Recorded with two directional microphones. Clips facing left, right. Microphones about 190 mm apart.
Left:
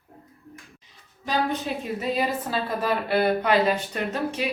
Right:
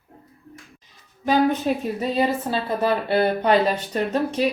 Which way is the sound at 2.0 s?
30° right (ahead or behind).